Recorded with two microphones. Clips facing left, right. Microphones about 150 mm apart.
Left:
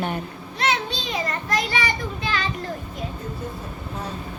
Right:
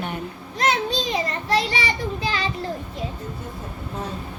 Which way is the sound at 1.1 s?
30° right (ahead or behind).